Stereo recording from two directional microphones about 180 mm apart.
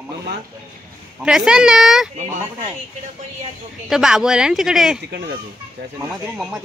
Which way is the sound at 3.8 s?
5° right (ahead or behind).